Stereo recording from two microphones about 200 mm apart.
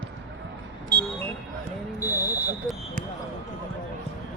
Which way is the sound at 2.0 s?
15° left (ahead or behind).